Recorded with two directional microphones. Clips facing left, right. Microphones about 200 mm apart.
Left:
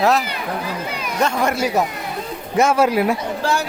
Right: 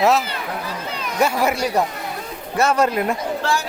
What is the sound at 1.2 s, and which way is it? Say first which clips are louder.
Speech: even; 5° right (ahead or behind).